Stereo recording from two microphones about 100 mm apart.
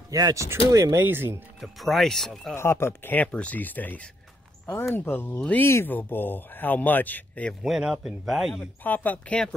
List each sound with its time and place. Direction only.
0.1 s speech: 35° right (ahead or behind)
0.9 s speech: 20° right (ahead or behind)
1.6 s speech: centre (ahead or behind)
2.5 s speech: 25° left (ahead or behind)
7.6 s speech: 5° right (ahead or behind)
8.8 s speech: 15° left (ahead or behind)